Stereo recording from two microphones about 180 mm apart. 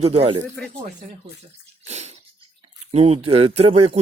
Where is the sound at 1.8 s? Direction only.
40° right (ahead or behind).